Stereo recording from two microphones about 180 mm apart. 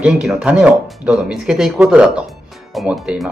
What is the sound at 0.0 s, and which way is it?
Speech, 5° right (ahead or behind).